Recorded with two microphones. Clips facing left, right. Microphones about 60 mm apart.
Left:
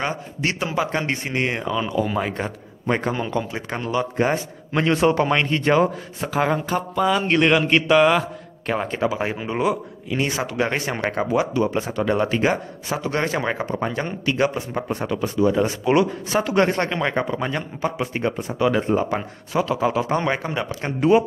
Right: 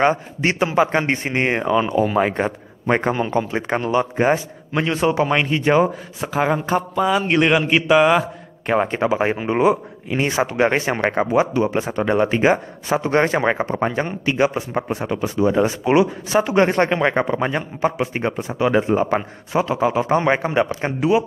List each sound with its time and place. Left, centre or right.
0.0 s speech: right
4.7 s a man's voice: centre
8.6 s speech: right
21.0 s a man's voice: centre